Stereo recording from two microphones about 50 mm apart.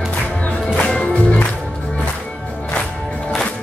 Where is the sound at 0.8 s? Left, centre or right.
Left.